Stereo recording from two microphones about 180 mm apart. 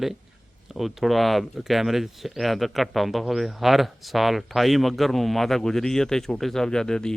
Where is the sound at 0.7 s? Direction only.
Centre (ahead or behind).